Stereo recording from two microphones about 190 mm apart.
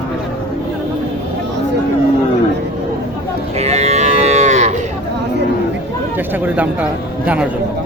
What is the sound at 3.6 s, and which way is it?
Moo, 35° right (ahead or behind).